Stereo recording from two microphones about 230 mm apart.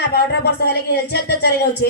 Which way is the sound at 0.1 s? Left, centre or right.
Left.